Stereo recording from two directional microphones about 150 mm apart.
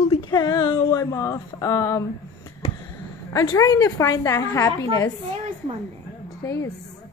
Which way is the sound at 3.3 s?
20° left (ahead or behind).